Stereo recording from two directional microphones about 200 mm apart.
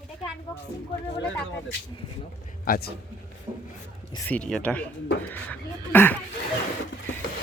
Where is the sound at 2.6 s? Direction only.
50° left (ahead or behind).